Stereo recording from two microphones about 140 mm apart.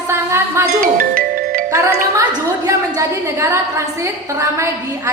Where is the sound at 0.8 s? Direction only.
90° right.